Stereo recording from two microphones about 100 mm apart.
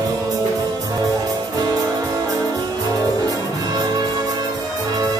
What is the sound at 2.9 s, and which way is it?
Music, 35° right (ahead or behind).